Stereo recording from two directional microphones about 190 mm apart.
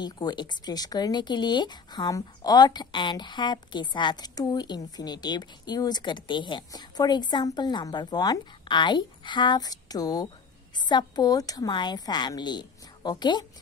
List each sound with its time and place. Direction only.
0.0 s speech: 20° left (ahead or behind)